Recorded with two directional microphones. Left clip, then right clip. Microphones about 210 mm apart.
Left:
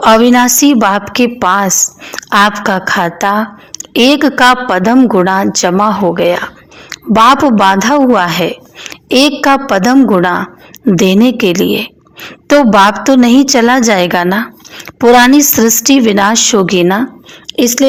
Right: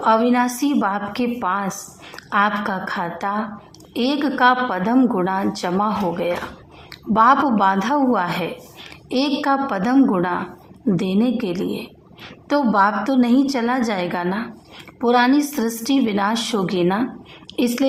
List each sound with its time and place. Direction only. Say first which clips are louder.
0.0 s a woman's voice: left 10 dB; 35° left (ahead or behind)